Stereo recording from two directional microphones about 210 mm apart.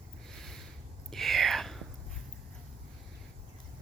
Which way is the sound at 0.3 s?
5° left (ahead or behind).